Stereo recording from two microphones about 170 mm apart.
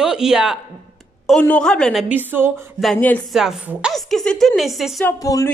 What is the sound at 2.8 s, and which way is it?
A woman's voice, 5° left (ahead or behind).